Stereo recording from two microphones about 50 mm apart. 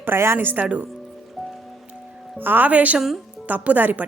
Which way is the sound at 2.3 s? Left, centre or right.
Right.